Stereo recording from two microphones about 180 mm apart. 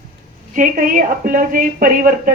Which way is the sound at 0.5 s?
45° right (ahead or behind).